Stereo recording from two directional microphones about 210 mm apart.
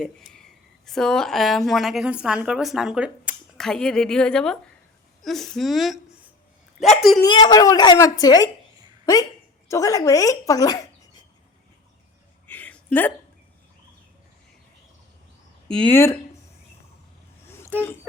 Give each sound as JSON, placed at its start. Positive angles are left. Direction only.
{"t": 0.0, "sound": "a woman's voice", "side_deg": 0}
{"t": 7.3, "sound": "speech", "side_deg": 20}
{"t": 9.6, "sound": "speech", "side_deg": 15}
{"t": 12.5, "sound": "a sound", "side_deg": 10}
{"t": 15.7, "sound": "speech", "side_deg": 5}